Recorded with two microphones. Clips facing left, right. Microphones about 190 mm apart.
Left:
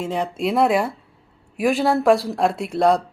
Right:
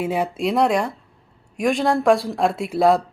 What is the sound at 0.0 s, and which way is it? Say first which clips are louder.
A woman's voice: right 1 dB; 10° right (ahead or behind).